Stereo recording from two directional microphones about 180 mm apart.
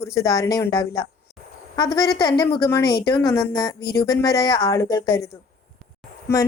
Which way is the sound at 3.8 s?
60° left (ahead or behind).